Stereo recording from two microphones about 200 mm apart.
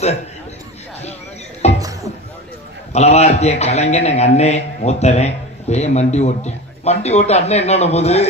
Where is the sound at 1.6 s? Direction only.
30° left (ahead or behind).